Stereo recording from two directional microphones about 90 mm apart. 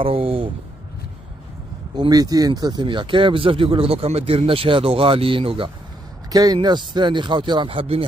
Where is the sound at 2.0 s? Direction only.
45° right (ahead or behind); by 5.7 s 80° right.